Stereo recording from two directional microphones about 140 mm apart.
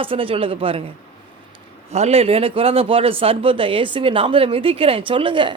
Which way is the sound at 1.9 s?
50° right (ahead or behind).